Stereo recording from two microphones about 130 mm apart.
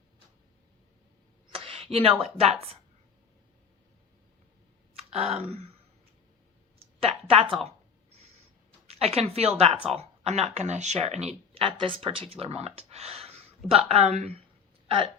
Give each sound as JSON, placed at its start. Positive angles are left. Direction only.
{"t": 1.5, "sound": "a sound", "side_deg": -45}
{"t": 2.2, "sound": "speech", "side_deg": -50}
{"t": 4.9, "sound": "speech", "side_deg": -55}
{"t": 6.7, "sound": "a sound", "side_deg": -50}
{"t": 8.9, "sound": "speech", "side_deg": -55}
{"t": 14.8, "sound": "speech", "side_deg": -40}